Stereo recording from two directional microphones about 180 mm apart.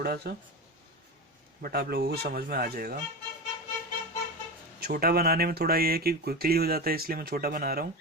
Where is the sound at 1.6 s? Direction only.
60° right (ahead or behind).